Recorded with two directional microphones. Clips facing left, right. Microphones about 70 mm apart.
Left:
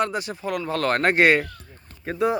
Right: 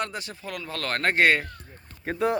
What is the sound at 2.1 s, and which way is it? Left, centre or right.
Speech, centre.